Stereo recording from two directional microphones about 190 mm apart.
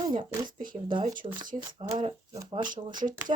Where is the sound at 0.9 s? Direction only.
25° right (ahead or behind).